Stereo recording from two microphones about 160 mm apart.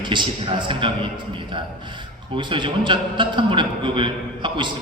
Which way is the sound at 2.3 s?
30° right (ahead or behind).